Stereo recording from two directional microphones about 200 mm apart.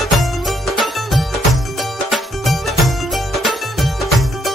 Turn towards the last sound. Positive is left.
turn(degrees=0)  # may be behind; listen again after turning